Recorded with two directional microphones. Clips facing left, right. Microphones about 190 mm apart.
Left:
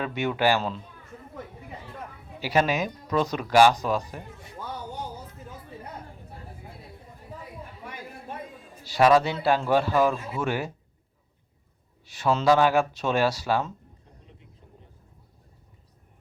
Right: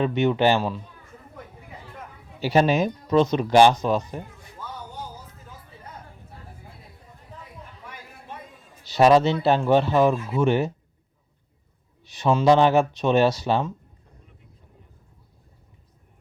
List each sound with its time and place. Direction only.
0.0 s speech: 20° right (ahead or behind)
2.4 s speech: 30° right (ahead or behind)
8.8 s speech: 25° right (ahead or behind)
12.1 s speech: 15° right (ahead or behind)